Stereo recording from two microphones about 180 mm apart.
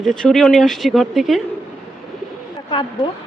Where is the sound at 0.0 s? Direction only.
Centre (ahead or behind).